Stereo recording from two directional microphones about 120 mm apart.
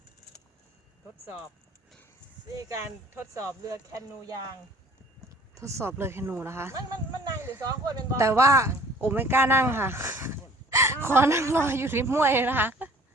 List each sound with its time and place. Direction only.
2.6 s speech: 25° right (ahead or behind)
5.5 s speech: 25° right (ahead or behind)